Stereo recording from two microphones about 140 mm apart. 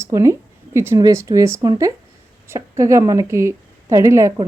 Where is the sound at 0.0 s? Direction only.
20° right (ahead or behind).